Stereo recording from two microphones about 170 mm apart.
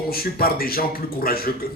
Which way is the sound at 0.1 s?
60° left (ahead or behind).